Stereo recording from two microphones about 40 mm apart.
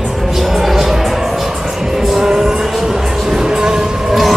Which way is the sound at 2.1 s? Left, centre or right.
Centre.